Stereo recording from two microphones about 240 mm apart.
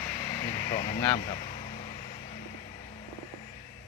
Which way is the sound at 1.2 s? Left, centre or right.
Left.